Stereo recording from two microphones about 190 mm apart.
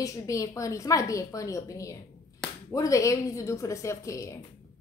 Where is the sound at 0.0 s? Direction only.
15° left (ahead or behind).